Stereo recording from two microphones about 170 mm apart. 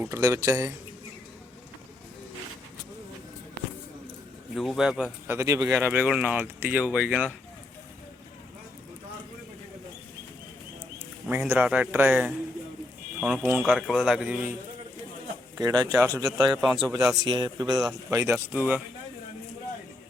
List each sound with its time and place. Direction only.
0.0 s speech: 15° right (ahead or behind)
4.5 s speech: centre (ahead or behind)
5.4 s speech: 20° right (ahead or behind)
11.3 s speech: 10° right (ahead or behind)
15.5 s speech: 20° right (ahead or behind)